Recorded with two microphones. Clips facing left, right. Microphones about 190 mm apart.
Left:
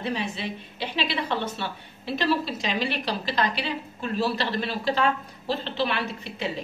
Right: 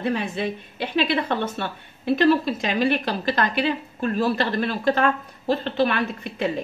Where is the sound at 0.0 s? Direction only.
50° right (ahead or behind).